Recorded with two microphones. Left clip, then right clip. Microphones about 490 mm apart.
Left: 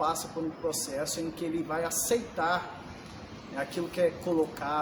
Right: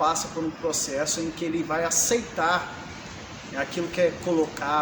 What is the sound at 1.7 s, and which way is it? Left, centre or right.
A woman's voice, left.